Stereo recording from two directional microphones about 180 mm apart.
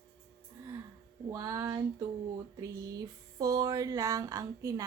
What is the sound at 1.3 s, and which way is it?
Speech, 20° right (ahead or behind).